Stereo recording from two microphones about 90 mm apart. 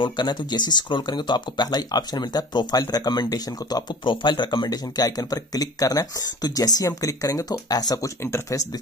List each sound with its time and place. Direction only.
0.0 s speech: 55° left (ahead or behind)
4.0 s speech: 65° left (ahead or behind); by 8.6 s 35° left (ahead or behind)